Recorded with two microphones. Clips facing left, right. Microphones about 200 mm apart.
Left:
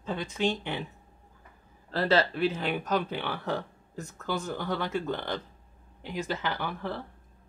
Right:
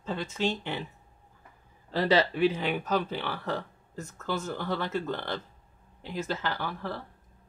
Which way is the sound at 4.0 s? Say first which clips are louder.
Even; 15° left (ahead or behind).